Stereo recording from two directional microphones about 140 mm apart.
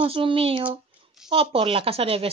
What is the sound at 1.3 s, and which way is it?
Speech, 40° right (ahead or behind).